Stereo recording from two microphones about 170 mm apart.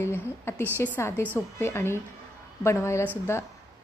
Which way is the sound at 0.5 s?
15° left (ahead or behind).